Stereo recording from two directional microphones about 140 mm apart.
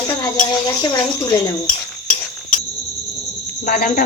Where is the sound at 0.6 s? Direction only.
25° left (ahead or behind).